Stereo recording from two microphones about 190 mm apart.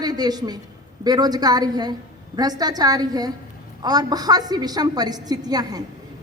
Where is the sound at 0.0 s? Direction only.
20° right (ahead or behind).